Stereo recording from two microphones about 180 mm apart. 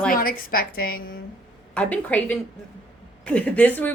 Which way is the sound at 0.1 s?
55° left (ahead or behind).